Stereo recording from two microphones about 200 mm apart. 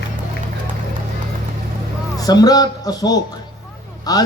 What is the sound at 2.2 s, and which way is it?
A man's voice, 20° left (ahead or behind).